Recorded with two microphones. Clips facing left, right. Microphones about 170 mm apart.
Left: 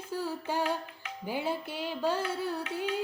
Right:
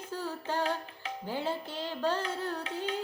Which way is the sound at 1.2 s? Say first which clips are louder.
Left 2 dB; 10° left (ahead or behind).